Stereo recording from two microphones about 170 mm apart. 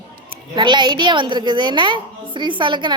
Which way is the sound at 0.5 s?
25° right (ahead or behind).